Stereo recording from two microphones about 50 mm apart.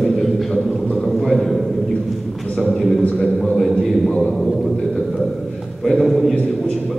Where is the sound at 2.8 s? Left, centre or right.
Centre.